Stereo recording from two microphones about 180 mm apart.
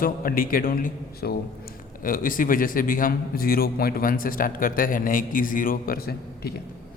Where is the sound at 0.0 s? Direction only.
50° left (ahead or behind).